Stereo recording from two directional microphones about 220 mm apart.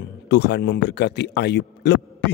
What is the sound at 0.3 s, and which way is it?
A man's voice, 50° left (ahead or behind).